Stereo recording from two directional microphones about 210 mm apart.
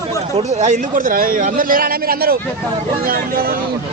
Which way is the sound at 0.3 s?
35° right (ahead or behind).